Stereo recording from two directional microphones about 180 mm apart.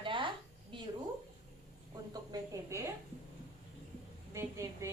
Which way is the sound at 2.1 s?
20° right (ahead or behind).